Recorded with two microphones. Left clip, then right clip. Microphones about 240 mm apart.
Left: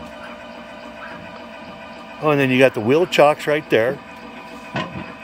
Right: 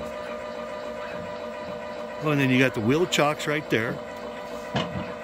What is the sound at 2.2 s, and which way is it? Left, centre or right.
Speech, centre.